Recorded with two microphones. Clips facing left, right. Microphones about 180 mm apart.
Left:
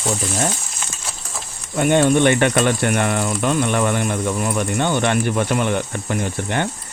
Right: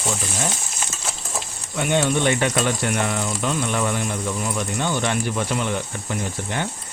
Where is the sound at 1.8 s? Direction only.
50° left (ahead or behind).